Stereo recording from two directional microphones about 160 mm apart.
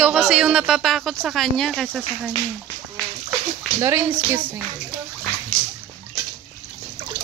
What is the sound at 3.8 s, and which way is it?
Speech, 20° right (ahead or behind).